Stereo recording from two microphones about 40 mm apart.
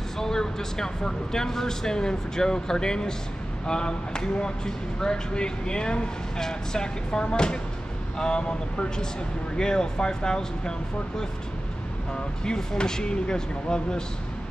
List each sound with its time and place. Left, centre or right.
0.2 s speech: centre
12.4 s speech: centre